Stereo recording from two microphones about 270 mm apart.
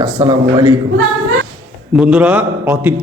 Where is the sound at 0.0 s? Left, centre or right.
Centre.